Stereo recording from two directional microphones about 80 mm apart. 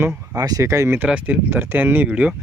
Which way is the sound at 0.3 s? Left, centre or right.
Right.